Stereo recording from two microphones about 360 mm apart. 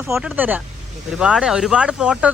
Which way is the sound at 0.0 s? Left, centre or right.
Centre.